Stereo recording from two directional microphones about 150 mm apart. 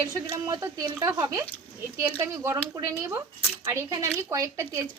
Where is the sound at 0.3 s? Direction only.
20° right (ahead or behind).